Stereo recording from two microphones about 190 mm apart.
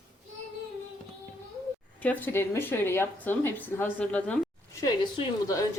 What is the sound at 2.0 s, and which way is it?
Speech, 10° left (ahead or behind).